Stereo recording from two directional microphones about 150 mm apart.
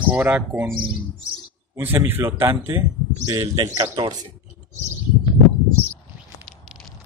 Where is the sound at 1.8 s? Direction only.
15° right (ahead or behind); by 4.2 s 30° right (ahead or behind).